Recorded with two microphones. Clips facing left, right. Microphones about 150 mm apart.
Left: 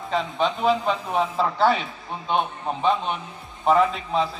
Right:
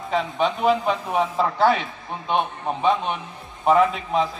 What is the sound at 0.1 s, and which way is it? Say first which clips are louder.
A man's voice: right 1 dB; 10° right (ahead or behind).